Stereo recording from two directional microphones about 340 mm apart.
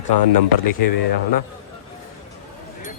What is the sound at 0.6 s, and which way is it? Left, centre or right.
Speech, left.